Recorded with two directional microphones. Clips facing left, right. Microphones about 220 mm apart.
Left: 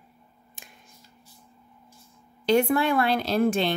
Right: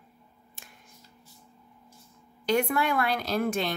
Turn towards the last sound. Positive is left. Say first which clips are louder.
# left 5 dB
turn(degrees=30)  # may be behind; listen again after turning